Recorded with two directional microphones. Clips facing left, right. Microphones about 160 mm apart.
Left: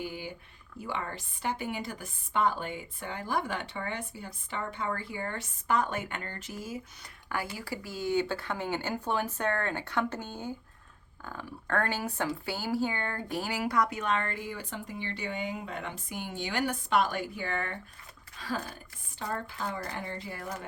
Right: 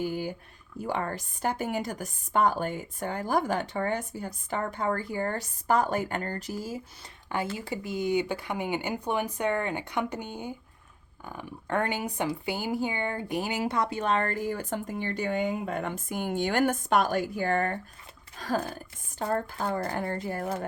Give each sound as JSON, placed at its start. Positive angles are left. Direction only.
{"t": 0.0, "sound": "a woman's voice", "side_deg": -40}